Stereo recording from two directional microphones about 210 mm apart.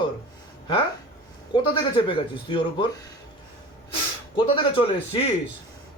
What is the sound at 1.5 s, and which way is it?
Speech, 25° left (ahead or behind).